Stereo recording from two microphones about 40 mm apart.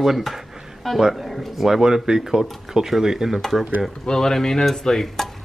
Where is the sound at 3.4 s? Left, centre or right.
Centre.